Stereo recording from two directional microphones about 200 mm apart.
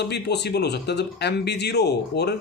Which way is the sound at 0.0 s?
55° left (ahead or behind).